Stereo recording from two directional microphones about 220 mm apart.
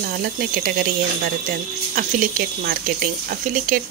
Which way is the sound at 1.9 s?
40° right (ahead or behind).